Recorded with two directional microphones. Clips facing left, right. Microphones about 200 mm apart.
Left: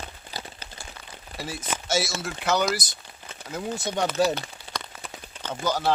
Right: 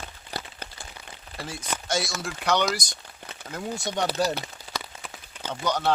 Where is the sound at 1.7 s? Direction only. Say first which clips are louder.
Left 2 dB; 5° left (ahead or behind).